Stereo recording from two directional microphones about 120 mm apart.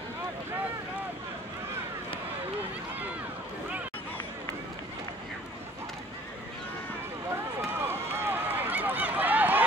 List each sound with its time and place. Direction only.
7.8 s run: 20° right (ahead or behind)